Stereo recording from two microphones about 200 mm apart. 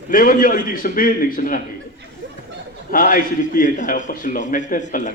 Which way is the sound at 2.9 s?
45° left (ahead or behind).